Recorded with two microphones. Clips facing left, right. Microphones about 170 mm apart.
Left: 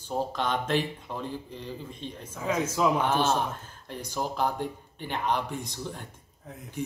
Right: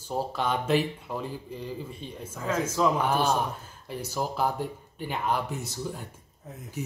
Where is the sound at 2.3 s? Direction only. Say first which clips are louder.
Even; 10° left (ahead or behind).